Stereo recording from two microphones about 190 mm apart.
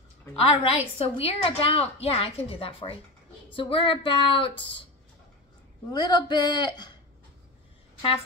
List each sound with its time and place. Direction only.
0.4 s a woman's voice: 35° left (ahead or behind)
3.5 s music: 25° left (ahead or behind)
5.9 s music: 25° left (ahead or behind)